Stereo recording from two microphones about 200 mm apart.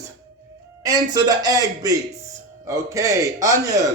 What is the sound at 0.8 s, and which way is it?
A man's voice, 20° right (ahead or behind).